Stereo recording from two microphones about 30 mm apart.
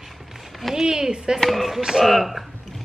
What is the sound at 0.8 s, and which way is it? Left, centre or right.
Speech, right.